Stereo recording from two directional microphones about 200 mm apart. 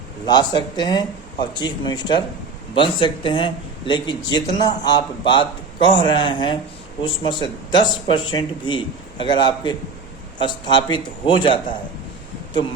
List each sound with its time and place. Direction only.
0.3 s speech: 20° left (ahead or behind)